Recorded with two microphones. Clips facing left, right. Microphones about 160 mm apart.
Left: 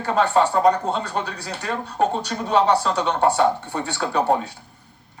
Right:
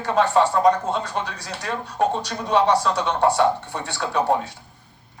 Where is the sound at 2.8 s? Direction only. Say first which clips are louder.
Even; 40° left (ahead or behind).